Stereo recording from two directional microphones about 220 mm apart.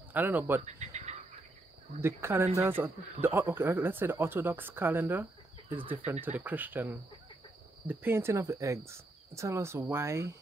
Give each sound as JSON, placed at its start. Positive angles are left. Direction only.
{"t": 0.1, "sound": "speech", "side_deg": -10}
{"t": 0.6, "sound": "cricket", "side_deg": -30}
{"t": 2.0, "sound": "speech", "side_deg": -10}